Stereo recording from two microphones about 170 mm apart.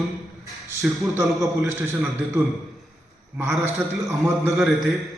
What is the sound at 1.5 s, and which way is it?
Speech, 15° right (ahead or behind).